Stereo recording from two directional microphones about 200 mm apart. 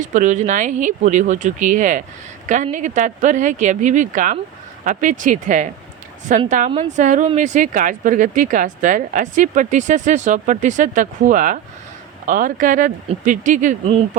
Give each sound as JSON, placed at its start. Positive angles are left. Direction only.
{"t": 0.0, "sound": "speech", "side_deg": -40}